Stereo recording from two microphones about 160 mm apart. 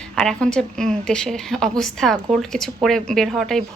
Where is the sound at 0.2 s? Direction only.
5° left (ahead or behind).